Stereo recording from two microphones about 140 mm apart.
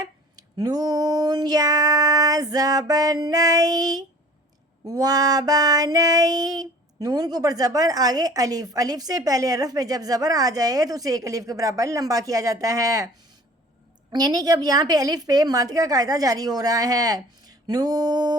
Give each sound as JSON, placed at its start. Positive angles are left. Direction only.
{"t": 0.0, "sound": "child singing", "side_deg": -25}
{"t": 14.1, "sound": "child singing", "side_deg": -30}